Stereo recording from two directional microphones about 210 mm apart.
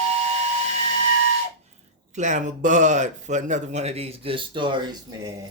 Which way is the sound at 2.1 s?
35° right (ahead or behind).